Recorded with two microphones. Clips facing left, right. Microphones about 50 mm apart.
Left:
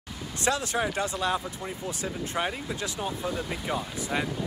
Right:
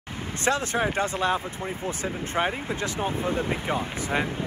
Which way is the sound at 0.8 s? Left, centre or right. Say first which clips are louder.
Right 3 dB; right.